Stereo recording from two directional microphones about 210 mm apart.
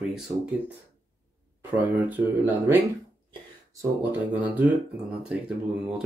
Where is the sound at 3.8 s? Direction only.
10° right (ahead or behind).